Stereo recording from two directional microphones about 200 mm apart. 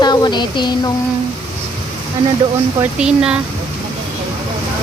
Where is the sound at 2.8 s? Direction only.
5° right (ahead or behind).